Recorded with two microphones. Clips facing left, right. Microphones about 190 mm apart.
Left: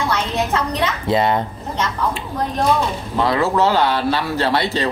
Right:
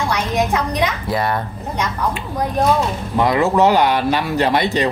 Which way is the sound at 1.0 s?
20° left (ahead or behind).